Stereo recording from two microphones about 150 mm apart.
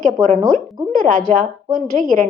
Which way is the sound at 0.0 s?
60° right (ahead or behind).